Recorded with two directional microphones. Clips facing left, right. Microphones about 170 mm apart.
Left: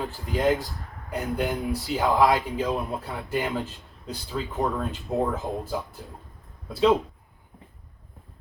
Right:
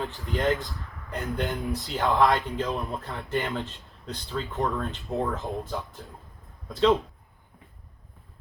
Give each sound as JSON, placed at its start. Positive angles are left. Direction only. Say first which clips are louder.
{"t": 0.1, "sound": "speech", "louder": "left 5 dB", "side_deg": 45}
{"t": 1.1, "sound": "speech", "louder": "left 3 dB", "side_deg": 10}